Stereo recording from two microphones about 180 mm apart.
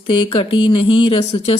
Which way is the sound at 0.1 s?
30° left (ahead or behind).